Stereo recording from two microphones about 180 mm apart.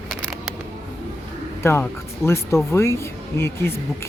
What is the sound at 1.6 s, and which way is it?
Speech, 15° left (ahead or behind).